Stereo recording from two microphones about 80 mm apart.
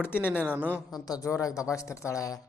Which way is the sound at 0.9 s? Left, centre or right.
Left.